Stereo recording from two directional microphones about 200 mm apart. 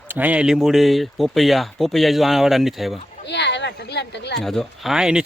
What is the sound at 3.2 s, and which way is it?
Speech, 60° left (ahead or behind).